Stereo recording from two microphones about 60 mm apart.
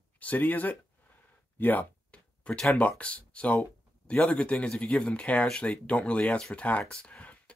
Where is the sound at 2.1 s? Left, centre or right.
Centre.